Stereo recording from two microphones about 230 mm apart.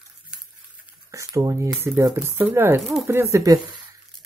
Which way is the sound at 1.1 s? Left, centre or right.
Centre.